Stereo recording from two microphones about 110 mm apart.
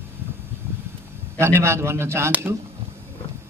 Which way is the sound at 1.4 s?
25° right (ahead or behind).